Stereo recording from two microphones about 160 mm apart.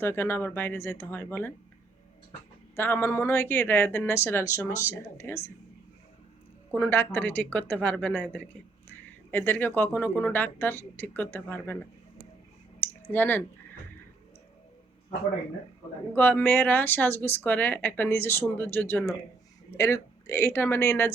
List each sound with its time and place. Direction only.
0.0 s speech: 15° left (ahead or behind)
2.7 s speech: 15° left (ahead or behind)
6.7 s speech: 15° left (ahead or behind)
12.8 s a sound: 10° left (ahead or behind)
16.1 s speech: 10° left (ahead or behind)